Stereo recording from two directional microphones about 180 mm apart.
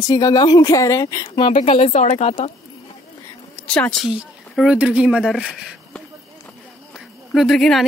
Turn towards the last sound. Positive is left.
turn(degrees=0)  # may be behind; listen again after turning